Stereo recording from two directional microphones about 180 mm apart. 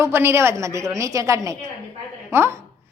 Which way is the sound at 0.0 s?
15° right (ahead or behind).